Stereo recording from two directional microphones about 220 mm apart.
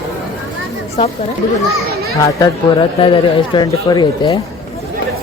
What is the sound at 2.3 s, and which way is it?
A man's voice, 20° left (ahead or behind).